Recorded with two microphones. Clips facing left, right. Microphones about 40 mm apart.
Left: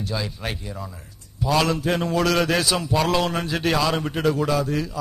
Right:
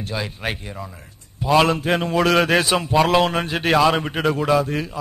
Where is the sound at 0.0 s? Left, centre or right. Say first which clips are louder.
Right 2 dB; right.